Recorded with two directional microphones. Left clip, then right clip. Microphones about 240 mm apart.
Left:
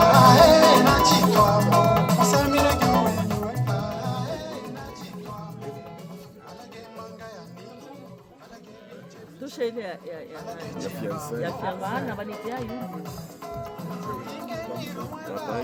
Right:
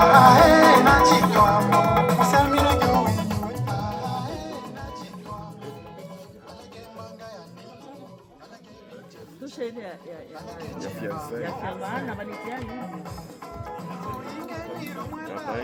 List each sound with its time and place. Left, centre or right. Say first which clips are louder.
0.0 s music: right 1 dB; left
9.6 s a sound: left 5 dB; left
11.1 s music: left 2 dB; left